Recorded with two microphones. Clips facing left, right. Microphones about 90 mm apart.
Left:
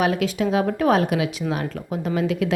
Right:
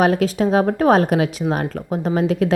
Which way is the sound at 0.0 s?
40° right (ahead or behind).